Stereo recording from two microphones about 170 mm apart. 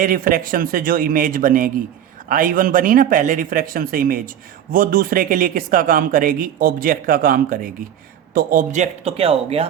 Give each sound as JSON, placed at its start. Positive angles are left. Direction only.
{"t": 0.0, "sound": "a man's voice", "side_deg": -55}